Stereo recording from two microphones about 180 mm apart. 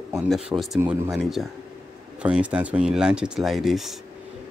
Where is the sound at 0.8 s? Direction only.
15° right (ahead or behind).